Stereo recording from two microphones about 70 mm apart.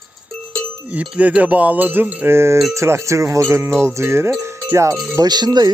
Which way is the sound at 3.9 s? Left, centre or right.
Right.